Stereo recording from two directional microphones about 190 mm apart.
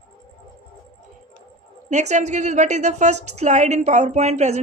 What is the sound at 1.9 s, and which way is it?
A woman's voice, 40° right (ahead or behind).